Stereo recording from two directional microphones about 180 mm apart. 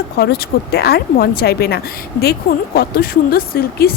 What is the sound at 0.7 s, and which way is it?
Speech, 60° left (ahead or behind).